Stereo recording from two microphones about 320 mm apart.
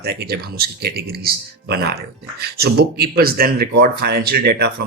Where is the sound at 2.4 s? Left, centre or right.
Right.